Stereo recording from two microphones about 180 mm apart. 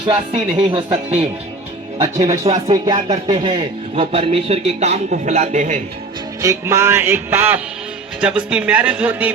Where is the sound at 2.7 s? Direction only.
25° right (ahead or behind); by 5.8 s 40° right (ahead or behind).